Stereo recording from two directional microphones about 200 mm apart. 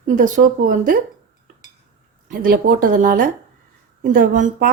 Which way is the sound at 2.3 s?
45° right (ahead or behind).